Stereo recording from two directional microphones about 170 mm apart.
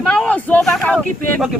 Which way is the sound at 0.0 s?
5° left (ahead or behind).